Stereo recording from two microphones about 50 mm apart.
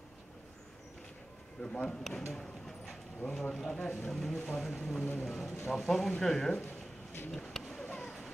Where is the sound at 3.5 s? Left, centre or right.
Centre.